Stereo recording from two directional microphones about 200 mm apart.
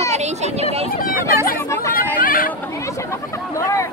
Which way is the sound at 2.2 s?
45° left (ahead or behind).